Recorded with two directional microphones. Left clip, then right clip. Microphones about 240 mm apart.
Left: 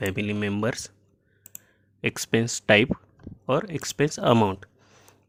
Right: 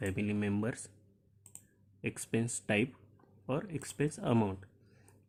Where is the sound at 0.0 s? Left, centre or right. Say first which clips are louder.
Left 9 dB; left.